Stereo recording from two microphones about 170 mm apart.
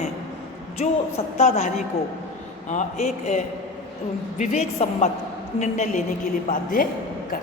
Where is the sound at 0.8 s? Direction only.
40° left (ahead or behind).